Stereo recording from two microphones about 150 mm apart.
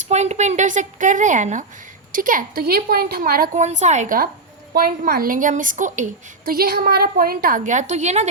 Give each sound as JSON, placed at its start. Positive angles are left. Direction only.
{"t": 0.1, "sound": "a woman's voice", "side_deg": -50}
{"t": 3.5, "sound": "a woman's voice", "side_deg": -50}
{"t": 4.7, "sound": "a woman's voice", "side_deg": -90}